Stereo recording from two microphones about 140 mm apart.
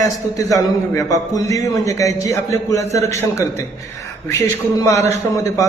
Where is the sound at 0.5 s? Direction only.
25° left (ahead or behind).